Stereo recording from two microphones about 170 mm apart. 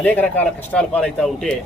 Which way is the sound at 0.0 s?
10° left (ahead or behind).